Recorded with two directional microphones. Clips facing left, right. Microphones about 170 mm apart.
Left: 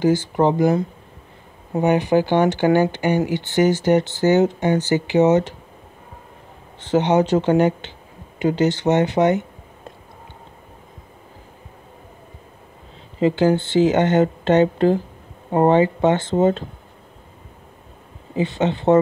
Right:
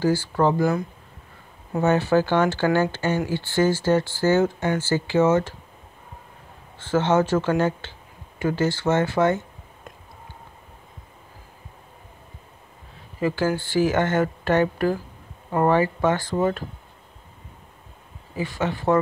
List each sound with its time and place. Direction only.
0.0 s speech: 20° left (ahead or behind)
6.8 s speech: 20° left (ahead or behind)
13.2 s speech: 20° left (ahead or behind)
18.3 s speech: 20° left (ahead or behind)